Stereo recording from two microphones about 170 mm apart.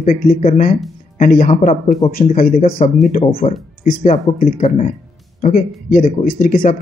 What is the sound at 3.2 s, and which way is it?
Speech, 35° left (ahead or behind).